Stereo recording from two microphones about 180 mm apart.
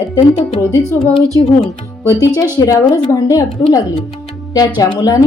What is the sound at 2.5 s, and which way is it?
A woman's voice, 20° left (ahead or behind).